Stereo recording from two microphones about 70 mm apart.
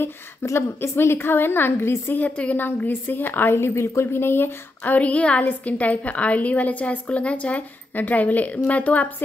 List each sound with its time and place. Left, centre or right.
0.0 s a woman's voice: left